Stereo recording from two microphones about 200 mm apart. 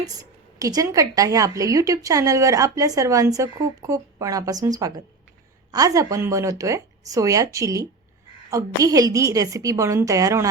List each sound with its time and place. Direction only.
0.0 s a woman's voice: 20° right (ahead or behind)